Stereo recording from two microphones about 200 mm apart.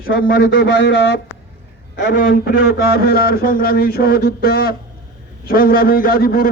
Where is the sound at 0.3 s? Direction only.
75° left (ahead or behind).